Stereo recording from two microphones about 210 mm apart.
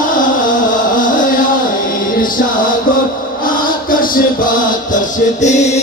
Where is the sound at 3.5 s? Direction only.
40° left (ahead or behind).